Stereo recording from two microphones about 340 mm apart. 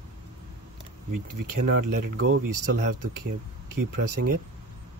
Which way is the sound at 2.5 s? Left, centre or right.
Right.